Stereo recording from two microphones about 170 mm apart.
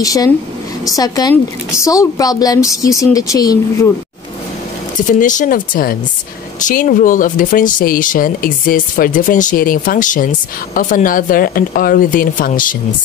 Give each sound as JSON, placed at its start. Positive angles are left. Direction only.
{"t": 0.0, "sound": "a woman's voice", "side_deg": 20}
{"t": 5.0, "sound": "speech", "side_deg": 50}